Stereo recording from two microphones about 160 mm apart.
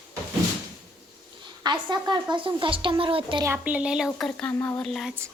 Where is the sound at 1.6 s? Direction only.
25° right (ahead or behind).